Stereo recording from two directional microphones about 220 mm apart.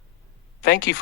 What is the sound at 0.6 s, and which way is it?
Speech, 50° left (ahead or behind).